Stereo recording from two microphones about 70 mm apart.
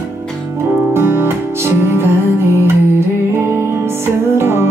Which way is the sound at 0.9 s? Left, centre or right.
Right.